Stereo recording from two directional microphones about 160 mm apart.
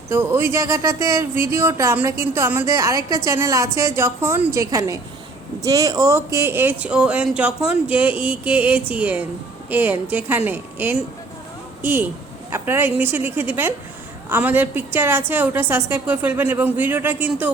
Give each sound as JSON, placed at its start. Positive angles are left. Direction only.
{"t": 0.1, "sound": "a woman's voice", "side_deg": -15}